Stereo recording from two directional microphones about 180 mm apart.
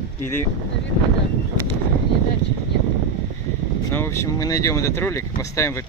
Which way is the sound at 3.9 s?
15° left (ahead or behind).